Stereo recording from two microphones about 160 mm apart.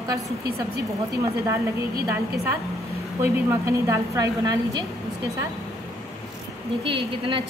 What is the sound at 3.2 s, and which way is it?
A woman's voice, 15° right (ahead or behind).